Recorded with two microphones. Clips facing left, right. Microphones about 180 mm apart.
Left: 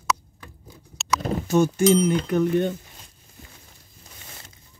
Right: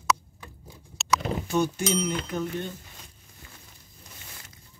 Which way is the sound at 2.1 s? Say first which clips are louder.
Left 9 dB; 55° left (ahead or behind).